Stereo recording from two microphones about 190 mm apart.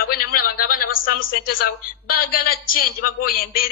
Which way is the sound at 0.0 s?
50° left (ahead or behind).